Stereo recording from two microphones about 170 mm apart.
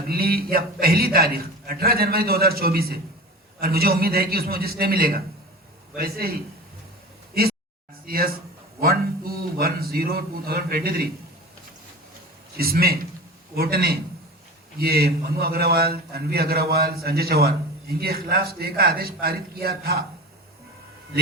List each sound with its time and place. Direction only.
0.1 s a man's voice: 60° right (ahead or behind)
8.0 s a man's voice: 60° right (ahead or behind)
12.5 s a man's voice: 60° right (ahead or behind)